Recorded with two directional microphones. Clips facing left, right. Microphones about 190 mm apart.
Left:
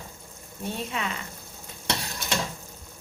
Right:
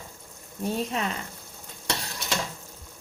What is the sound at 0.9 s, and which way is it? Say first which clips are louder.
Speech: right 2 dB; 40° right (ahead or behind).